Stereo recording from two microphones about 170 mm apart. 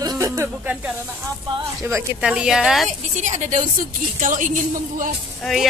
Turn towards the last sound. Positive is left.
turn(degrees=0)  # may be behind; listen again after turning